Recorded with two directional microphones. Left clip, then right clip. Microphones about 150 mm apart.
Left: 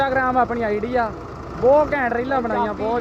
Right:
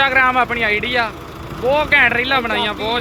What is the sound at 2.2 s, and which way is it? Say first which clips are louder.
Speech: right 4 dB; 50° right (ahead or behind).